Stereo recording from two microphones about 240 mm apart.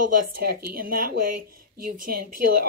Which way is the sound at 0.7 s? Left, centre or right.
Right.